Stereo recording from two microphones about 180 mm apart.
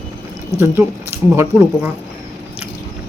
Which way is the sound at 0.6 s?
15° right (ahead or behind).